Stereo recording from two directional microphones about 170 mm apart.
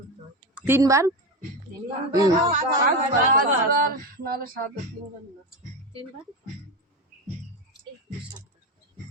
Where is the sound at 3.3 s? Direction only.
55° right (ahead or behind).